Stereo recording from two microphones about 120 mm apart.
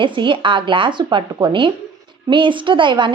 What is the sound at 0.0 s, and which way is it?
A woman's voice, 45° right (ahead or behind).